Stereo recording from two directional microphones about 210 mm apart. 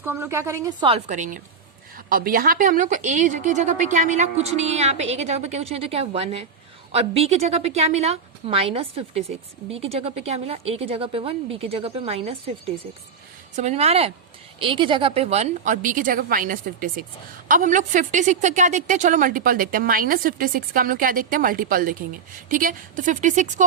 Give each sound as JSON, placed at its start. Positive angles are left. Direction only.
{"t": 0.0, "sound": "a woman's voice", "side_deg": -10}